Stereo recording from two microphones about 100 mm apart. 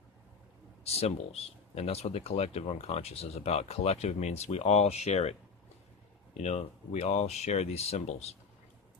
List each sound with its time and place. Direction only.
0.9 s speech: 90° left
6.5 s speech: 90° left